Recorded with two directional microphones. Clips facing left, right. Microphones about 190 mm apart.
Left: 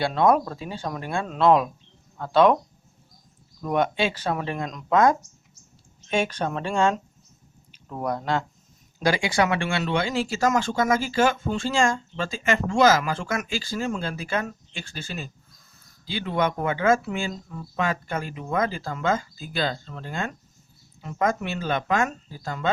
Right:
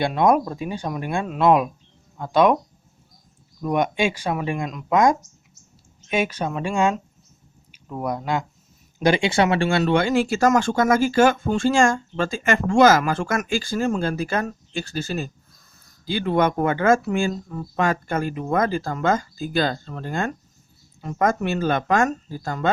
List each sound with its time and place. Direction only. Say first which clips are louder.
0.0 s speech: right 2 dB; 15° right (ahead or behind)
3.6 s speech: right 2 dB; 15° right (ahead or behind)
9.0 s speech: right 4 dB; 20° right (ahead or behind); by 22.7 s 45° right (ahead or behind)